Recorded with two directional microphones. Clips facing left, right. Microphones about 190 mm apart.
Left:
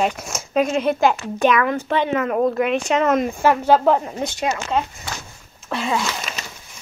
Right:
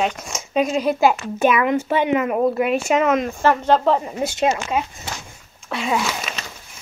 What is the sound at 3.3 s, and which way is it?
Speech, 10° left (ahead or behind).